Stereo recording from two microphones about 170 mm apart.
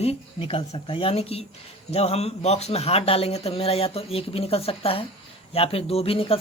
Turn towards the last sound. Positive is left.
turn(degrees=35)  # may be behind; listen again after turning